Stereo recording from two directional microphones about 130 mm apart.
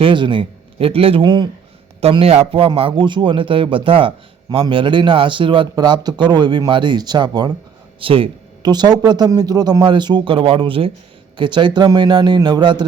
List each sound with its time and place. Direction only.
0.0 s a man's voice: 40° right (ahead or behind)
2.0 s a man's voice: 50° right (ahead or behind); by 7.5 s 35° right (ahead or behind)
7.9 s a man's voice: 45° right (ahead or behind)